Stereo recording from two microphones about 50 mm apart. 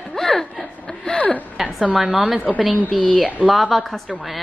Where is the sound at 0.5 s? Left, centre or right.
Centre.